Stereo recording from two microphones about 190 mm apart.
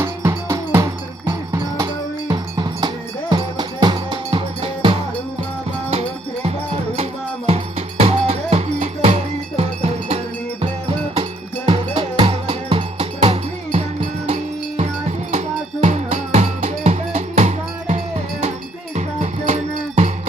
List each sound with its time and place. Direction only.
0.0 s music: 15° right (ahead or behind)
1.3 s cowbell: 20° right (ahead or behind)
6.9 s music: 35° right (ahead or behind)
11.2 s music: 25° right (ahead or behind)